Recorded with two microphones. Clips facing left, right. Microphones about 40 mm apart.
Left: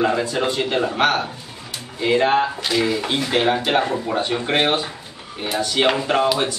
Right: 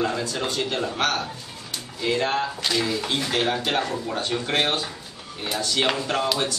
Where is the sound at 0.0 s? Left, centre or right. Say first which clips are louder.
Left 6 dB; left.